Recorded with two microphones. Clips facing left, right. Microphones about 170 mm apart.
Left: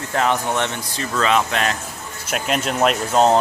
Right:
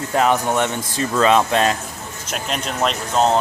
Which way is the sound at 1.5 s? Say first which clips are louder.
Right 4 dB; 25° right (ahead or behind).